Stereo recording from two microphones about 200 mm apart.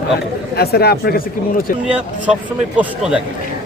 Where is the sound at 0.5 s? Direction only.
50° left (ahead or behind).